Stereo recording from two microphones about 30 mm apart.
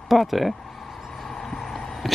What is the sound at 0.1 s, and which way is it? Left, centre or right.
Speech, centre.